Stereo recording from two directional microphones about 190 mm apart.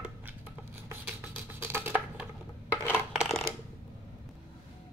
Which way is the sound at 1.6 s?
10° right (ahead or behind).